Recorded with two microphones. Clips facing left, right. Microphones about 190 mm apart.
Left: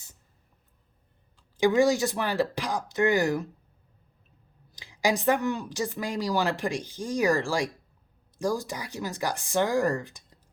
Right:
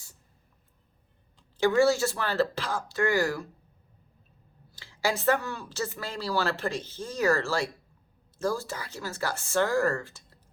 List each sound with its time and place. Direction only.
1.5 s a woman's voice: 15° left (ahead or behind)
4.7 s a woman's voice: 15° left (ahead or behind)